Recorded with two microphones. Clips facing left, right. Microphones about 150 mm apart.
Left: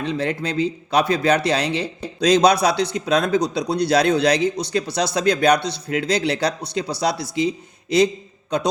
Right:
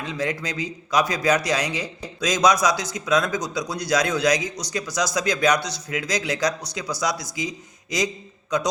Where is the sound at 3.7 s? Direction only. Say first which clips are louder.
Left 8 dB; 30° left (ahead or behind).